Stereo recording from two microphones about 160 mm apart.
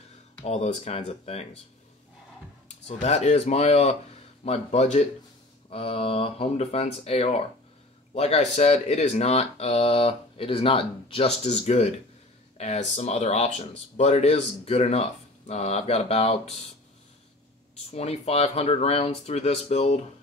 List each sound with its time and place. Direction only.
0.5 s speech: 45° left (ahead or behind)
3.0 s speech: 45° left (ahead or behind)
17.9 s speech: 40° left (ahead or behind)